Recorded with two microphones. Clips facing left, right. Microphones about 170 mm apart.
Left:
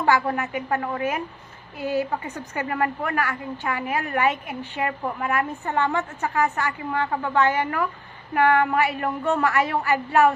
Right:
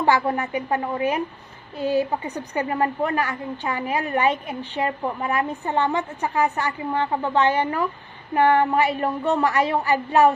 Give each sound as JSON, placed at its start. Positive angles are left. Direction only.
{"t": 0.0, "sound": "a woman's voice", "side_deg": -20}